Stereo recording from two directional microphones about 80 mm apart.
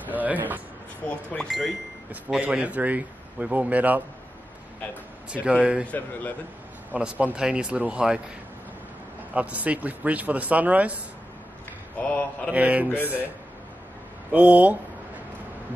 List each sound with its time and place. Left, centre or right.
0.1 s a sound: right
1.0 s speech: centre
1.5 s speech: centre
2.4 s a man's voice: centre
5.3 s speech: centre
5.9 s speech: left
6.9 s speech: centre
9.3 s a man's voice: centre
12.0 s speech: centre
12.4 s speech: centre
14.3 s speech: centre